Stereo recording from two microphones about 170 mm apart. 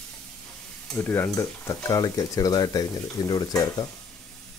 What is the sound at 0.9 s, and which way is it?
Stir, 15° left (ahead or behind).